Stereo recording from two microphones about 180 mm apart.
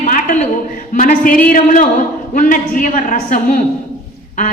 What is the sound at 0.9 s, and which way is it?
A woman's voice, 50° left (ahead or behind).